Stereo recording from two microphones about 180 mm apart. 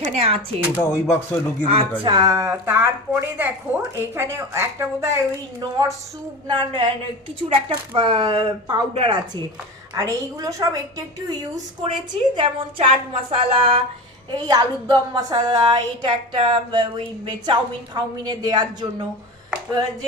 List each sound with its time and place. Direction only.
0.0 s speech: 35° right (ahead or behind)
0.8 s speech: 15° left (ahead or behind)
2.0 s a woman's voice: 25° right (ahead or behind)